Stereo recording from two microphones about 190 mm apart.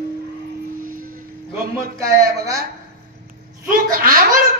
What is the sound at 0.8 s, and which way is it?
Vehicle, 45° right (ahead or behind).